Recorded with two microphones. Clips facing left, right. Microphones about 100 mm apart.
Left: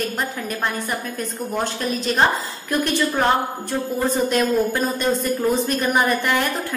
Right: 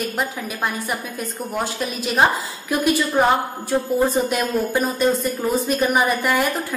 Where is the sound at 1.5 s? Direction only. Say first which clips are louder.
Left 2 dB; 5° right (ahead or behind).